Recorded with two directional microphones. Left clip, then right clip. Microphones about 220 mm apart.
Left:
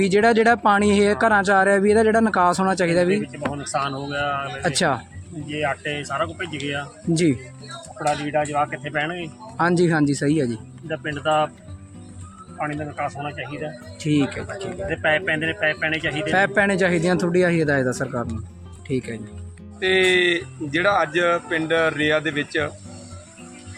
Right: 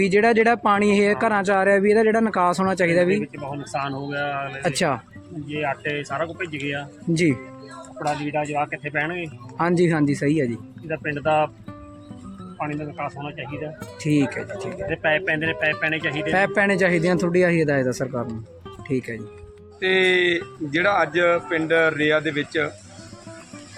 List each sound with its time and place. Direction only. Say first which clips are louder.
0.0 s speech: left 1 dB; 5° left (ahead or behind)
10.8 s speech: even; 20° right (ahead or behind)
12.5 s speech: left 2 dB; centre (ahead or behind)